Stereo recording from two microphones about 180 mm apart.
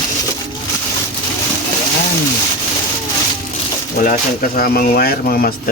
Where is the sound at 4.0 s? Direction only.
50° left (ahead or behind).